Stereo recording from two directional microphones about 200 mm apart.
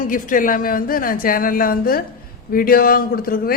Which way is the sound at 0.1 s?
40° left (ahead or behind).